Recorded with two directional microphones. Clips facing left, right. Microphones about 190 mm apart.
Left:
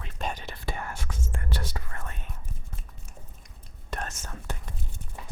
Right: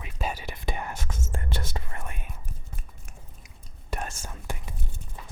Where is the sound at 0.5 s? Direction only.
15° right (ahead or behind).